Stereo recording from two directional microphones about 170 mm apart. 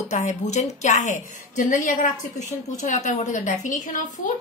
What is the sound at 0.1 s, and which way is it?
A woman's voice, 45° left (ahead or behind).